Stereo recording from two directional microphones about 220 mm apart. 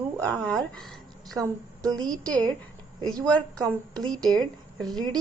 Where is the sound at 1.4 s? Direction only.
15° right (ahead or behind).